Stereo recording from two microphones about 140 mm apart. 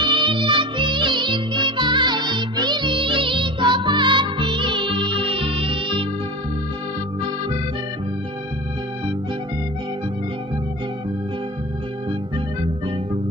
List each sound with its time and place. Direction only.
0.0 s music: 35° right (ahead or behind)